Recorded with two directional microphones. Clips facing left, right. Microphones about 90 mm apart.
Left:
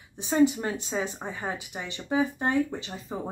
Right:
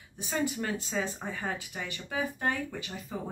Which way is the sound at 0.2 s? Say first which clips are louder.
Left 9 dB; 25° left (ahead or behind).